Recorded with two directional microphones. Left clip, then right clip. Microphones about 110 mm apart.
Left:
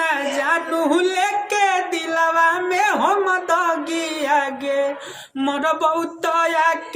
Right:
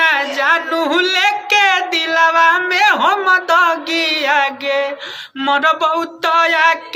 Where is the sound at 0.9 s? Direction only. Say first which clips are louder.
Right 5 dB; 40° left (ahead or behind).